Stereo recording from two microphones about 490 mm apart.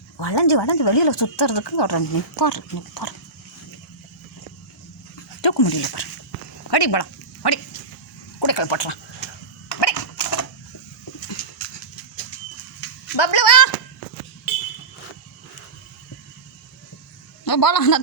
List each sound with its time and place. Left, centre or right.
0.2 s speech: left
5.4 s speech: left
6.7 s dog: left
8.4 s speech: left
9.8 s a sound: left
13.1 s a sound: left
17.4 s a woman's voice: left